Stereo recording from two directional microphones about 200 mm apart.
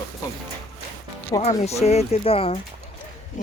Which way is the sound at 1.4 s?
35° left (ahead or behind).